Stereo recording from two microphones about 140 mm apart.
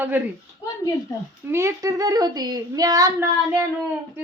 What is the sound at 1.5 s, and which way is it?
Speech, 20° right (ahead or behind).